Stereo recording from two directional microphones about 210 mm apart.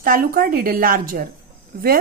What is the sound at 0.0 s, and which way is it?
Speech, 45° right (ahead or behind).